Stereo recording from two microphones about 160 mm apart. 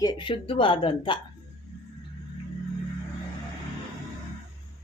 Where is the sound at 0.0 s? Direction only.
30° left (ahead or behind).